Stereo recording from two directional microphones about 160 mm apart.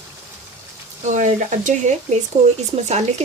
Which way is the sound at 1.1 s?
50° right (ahead or behind).